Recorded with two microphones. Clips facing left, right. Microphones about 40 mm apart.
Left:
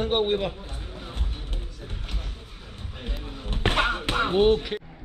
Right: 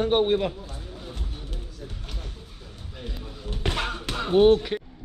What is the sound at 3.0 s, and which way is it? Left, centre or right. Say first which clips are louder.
Music: even; left.